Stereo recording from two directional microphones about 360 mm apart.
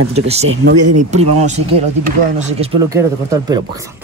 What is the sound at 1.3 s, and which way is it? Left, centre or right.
Speech, centre.